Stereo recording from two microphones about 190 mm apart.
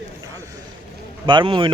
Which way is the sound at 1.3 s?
25° right (ahead or behind).